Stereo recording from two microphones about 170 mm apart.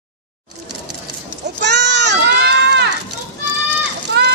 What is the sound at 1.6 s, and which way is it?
Run, 90° right.